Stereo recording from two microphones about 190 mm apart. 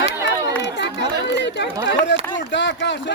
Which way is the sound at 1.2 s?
65° left (ahead or behind).